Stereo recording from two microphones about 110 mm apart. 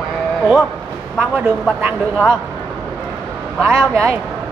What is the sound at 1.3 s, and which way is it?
Speech, 15° right (ahead or behind).